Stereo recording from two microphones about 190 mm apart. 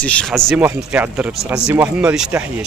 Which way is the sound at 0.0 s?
5° left (ahead or behind).